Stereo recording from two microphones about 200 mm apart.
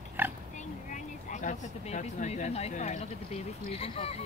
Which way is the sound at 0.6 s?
40° left (ahead or behind).